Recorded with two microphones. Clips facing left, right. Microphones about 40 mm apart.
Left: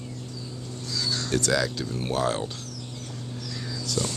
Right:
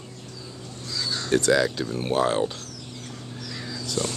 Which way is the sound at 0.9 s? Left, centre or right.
Centre.